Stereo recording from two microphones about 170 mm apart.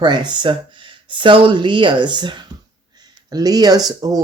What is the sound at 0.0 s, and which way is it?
Speech, 25° right (ahead or behind).